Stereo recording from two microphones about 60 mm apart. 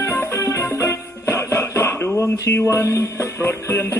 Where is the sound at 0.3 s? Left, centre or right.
Left.